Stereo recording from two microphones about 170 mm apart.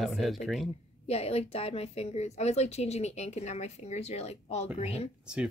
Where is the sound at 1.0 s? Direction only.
40° left (ahead or behind).